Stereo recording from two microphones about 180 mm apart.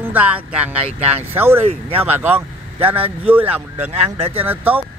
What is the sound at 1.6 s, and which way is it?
Speech, 30° right (ahead or behind).